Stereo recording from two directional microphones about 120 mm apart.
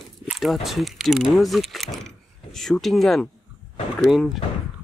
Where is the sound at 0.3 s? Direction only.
Centre (ahead or behind).